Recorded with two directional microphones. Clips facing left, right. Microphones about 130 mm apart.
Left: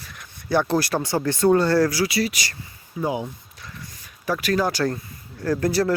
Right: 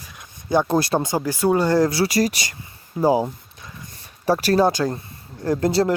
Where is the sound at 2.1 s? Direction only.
40° right (ahead or behind); by 5.9 s 25° right (ahead or behind).